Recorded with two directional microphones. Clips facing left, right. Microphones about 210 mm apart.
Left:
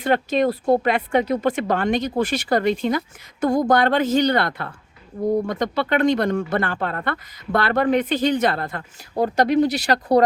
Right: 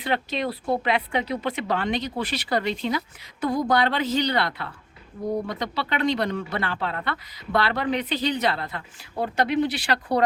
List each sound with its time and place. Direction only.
0.0 s speech: 45° left (ahead or behind)